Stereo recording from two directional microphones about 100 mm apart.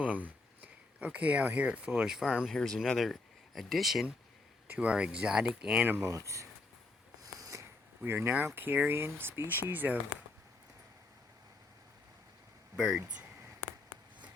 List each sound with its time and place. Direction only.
0.0 s speech: 15° right (ahead or behind)
4.7 s speech: 15° right (ahead or behind)
6.1 s speech: 30° right (ahead or behind)
7.2 s a sound: 35° right (ahead or behind)
8.0 s speech: 20° right (ahead or behind)
12.7 s speech: 5° right (ahead or behind)